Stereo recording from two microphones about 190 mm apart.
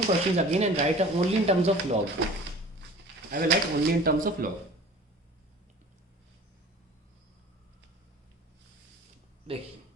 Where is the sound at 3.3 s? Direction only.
55° right (ahead or behind).